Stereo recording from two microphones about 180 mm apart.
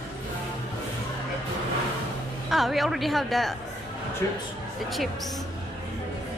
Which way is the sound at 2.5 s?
Centre (ahead or behind).